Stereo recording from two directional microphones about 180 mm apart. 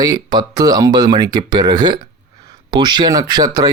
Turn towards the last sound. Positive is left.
turn(degrees=-20)  # may be behind; listen again after turning